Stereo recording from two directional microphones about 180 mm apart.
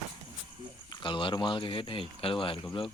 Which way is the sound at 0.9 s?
25° left (ahead or behind).